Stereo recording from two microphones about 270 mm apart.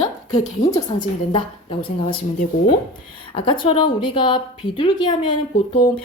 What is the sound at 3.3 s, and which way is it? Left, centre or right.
A woman's voice, centre.